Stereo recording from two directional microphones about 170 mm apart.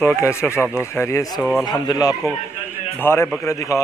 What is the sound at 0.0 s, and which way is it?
Speech, 15° left (ahead or behind).